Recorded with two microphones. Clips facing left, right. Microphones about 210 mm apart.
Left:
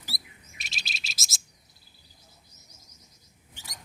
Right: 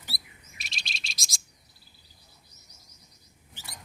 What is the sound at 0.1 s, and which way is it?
Bird, centre (ahead or behind).